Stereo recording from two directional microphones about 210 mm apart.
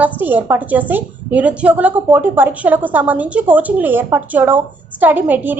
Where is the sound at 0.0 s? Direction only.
10° right (ahead or behind).